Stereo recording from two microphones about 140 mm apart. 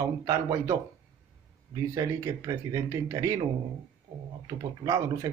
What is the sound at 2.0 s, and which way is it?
Speech, 20° right (ahead or behind).